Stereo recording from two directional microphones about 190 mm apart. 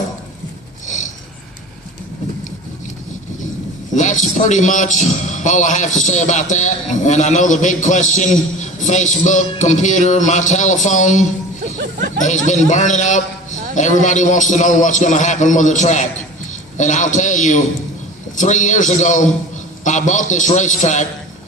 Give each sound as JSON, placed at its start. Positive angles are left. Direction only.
{"t": 0.9, "sound": "a sound", "side_deg": 40}
{"t": 3.9, "sound": "a man's voice", "side_deg": 40}
{"t": 12.5, "sound": "a man's voice", "side_deg": 40}